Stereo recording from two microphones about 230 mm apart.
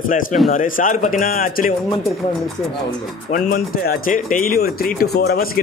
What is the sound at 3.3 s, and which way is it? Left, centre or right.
Speech, left.